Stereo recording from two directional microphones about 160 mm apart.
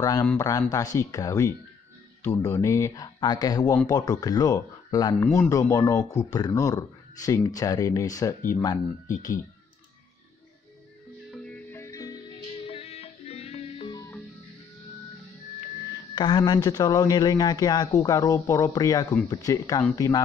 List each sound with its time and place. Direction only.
0.0 s speech: 20° left (ahead or behind)
11.3 s music: 5° left (ahead or behind); by 12.4 s 25° left (ahead or behind)
12.6 s music: 40° left (ahead or behind)
16.2 s speech: 25° left (ahead or behind)